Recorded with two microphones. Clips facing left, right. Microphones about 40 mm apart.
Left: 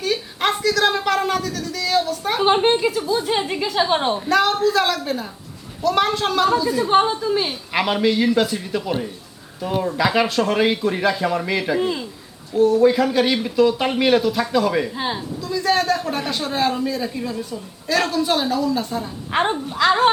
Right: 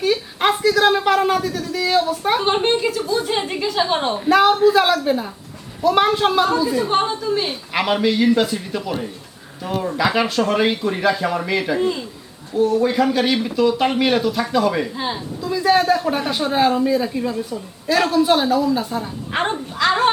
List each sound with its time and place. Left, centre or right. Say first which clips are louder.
0.0 s a sound: right 3 dB; centre
2.4 s a man's voice: left 2 dB; centre
4.3 s speech: right 5 dB; centre
6.8 s a man's voice: left 2 dB; centre
10.0 s a man's voice: right 1 dB; centre
12.5 s a man's voice: left 2 dB; centre
15.4 s speech: right 4 dB; centre
19.3 s a woman's voice: left 2 dB; centre